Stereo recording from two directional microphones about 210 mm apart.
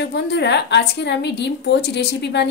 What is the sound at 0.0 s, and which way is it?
A woman's voice, 55° left (ahead or behind).